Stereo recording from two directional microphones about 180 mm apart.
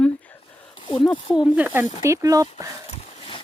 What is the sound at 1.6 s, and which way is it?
Speech, 10° right (ahead or behind).